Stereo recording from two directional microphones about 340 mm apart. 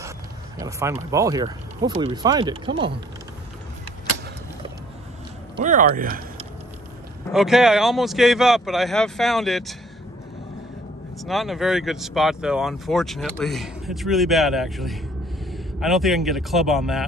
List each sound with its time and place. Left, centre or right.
0.6 s speech: centre
5.6 s speech: right
7.2 s speech: centre
11.2 s a man's voice: centre